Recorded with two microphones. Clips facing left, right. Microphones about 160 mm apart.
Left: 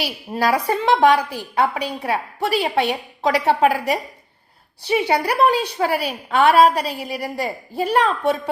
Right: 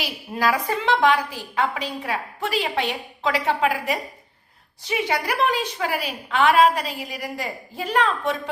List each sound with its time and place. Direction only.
0.3 s a woman's voice: 35° left (ahead or behind)